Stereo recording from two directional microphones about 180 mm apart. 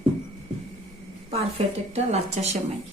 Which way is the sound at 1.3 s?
35° right (ahead or behind).